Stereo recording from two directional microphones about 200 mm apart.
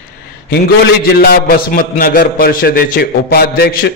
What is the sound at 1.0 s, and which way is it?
A man's voice, 50° left (ahead or behind).